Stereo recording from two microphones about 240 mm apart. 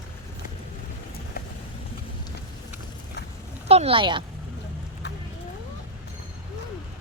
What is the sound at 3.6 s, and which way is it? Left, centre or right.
Speech, right.